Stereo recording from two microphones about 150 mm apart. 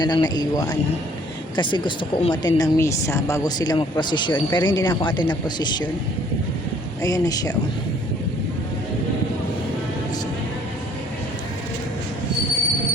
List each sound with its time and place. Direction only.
0.0 s a woman's voice: 25° left (ahead or behind)
7.0 s a woman's voice: 25° left (ahead or behind)